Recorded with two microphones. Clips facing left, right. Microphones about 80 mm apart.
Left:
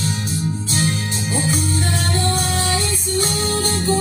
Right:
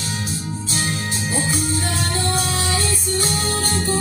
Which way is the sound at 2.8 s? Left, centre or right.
Right.